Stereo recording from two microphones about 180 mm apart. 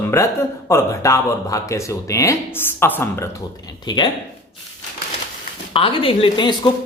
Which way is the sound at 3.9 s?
25° left (ahead or behind).